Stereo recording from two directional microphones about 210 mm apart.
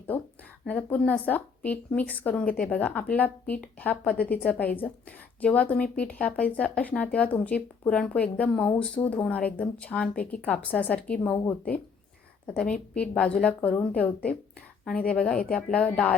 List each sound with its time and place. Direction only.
0.1 s a woman's voice: 10° left (ahead or behind)